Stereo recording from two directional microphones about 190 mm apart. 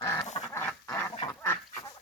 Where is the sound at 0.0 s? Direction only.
15° left (ahead or behind).